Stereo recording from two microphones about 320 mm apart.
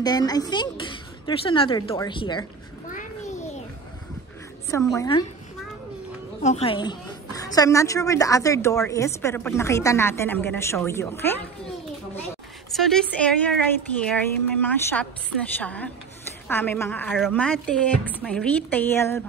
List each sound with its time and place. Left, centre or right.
0.0 s a woman's voice: centre
2.9 s a sound: left
4.6 s a woman's voice: centre
6.4 s a woman's voice: centre
12.7 s a woman's voice: centre